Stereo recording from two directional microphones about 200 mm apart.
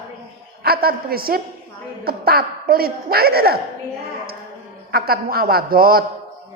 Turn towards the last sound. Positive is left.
turn(degrees=-45)  # may be behind; listen again after turning